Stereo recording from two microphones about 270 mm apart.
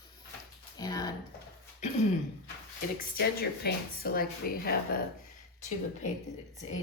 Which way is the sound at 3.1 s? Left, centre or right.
Left.